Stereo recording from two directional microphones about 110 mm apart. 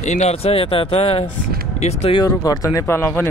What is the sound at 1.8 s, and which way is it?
Speech, 80° left.